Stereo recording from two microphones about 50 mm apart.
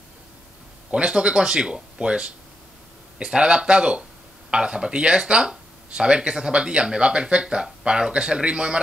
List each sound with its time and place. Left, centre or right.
0.9 s speech: right